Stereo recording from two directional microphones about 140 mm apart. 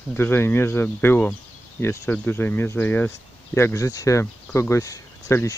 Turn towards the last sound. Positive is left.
turn(degrees=20)  # may be behind; listen again after turning